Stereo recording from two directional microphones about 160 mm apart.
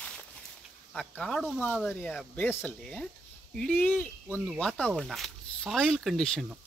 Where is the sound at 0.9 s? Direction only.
5° left (ahead or behind).